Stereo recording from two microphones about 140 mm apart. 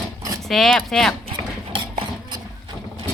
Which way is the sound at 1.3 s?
35° right (ahead or behind).